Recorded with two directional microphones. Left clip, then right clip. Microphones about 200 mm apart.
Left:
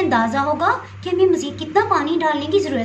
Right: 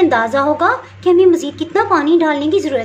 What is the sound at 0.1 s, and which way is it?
A woman's voice, 45° right (ahead or behind).